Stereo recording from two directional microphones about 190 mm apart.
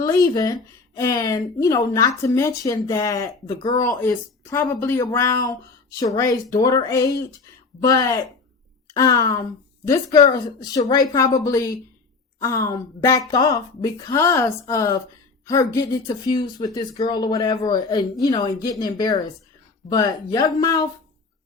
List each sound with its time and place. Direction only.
0.0 s speech: 20° left (ahead or behind)